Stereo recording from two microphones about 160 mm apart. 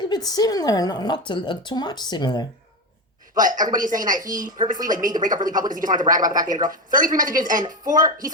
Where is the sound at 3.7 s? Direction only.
55° right (ahead or behind).